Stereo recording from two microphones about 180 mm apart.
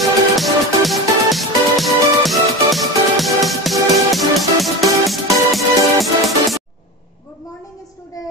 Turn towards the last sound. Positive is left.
turn(degrees=0)  # may be behind; listen again after turning